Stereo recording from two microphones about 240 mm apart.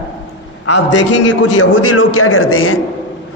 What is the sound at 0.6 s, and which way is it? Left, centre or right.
Speech, left.